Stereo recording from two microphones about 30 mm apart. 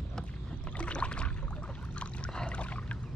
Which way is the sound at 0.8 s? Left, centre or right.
Left.